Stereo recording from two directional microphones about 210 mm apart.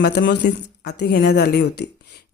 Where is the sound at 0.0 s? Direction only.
50° left (ahead or behind).